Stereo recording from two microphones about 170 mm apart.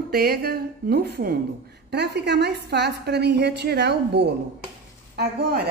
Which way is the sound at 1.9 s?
80° right.